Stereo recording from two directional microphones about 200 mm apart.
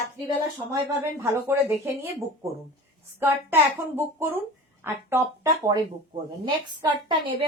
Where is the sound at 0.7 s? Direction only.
15° right (ahead or behind).